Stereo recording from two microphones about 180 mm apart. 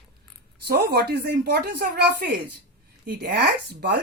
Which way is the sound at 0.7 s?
65° right (ahead or behind).